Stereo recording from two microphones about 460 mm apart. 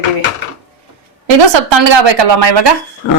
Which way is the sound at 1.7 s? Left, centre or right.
Right.